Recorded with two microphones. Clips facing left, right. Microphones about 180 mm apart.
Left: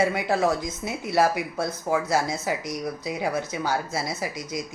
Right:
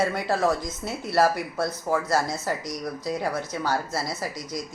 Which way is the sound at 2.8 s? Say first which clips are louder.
Even; 5° left (ahead or behind).